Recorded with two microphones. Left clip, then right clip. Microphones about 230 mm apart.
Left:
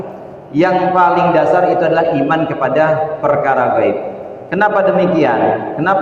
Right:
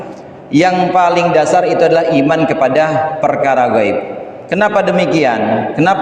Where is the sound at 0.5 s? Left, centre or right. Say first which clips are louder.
Right 2 dB; right.